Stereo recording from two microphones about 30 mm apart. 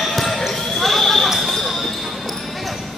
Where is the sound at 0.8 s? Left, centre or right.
Centre.